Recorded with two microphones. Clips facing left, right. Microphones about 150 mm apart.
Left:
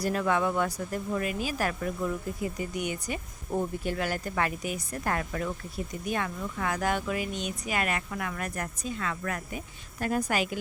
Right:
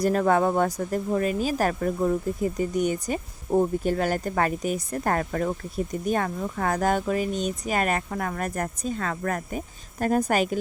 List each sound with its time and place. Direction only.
0.0 s speech: 40° right (ahead or behind)